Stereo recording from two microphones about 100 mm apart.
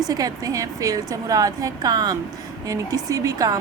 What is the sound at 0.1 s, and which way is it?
A woman's voice, 35° right (ahead or behind).